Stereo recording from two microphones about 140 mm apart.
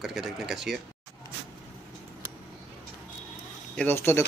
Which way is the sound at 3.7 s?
15° left (ahead or behind).